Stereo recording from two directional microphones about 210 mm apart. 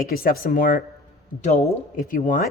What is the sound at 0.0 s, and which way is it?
A woman's voice, 45° left (ahead or behind).